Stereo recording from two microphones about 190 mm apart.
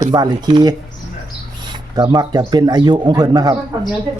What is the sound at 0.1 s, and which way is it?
Speech, 20° right (ahead or behind).